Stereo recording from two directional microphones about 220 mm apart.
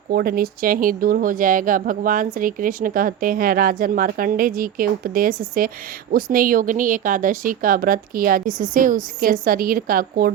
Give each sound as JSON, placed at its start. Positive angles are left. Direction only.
{"t": 0.1, "sound": "a woman's voice", "side_deg": -45}